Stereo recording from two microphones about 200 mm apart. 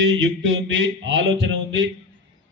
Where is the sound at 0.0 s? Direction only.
70° right (ahead or behind).